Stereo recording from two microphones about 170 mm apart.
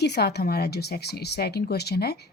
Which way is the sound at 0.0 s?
75° left (ahead or behind).